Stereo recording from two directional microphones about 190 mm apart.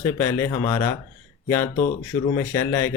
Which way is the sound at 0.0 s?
15° left (ahead or behind).